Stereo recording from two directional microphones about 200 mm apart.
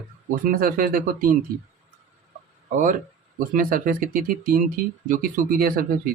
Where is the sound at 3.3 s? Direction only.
45° right (ahead or behind).